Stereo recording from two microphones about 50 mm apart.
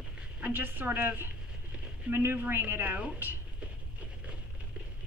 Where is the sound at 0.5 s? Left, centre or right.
Right.